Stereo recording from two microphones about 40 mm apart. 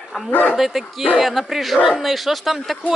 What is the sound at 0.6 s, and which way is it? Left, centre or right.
Speech, centre.